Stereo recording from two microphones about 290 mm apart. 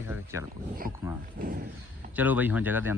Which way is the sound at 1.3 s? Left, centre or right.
Right.